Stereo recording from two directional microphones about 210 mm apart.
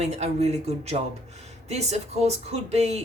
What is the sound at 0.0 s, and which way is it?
Speech, 30° right (ahead or behind).